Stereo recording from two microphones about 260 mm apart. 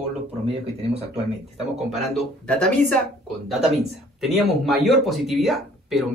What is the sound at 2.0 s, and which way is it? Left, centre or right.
Speech, centre.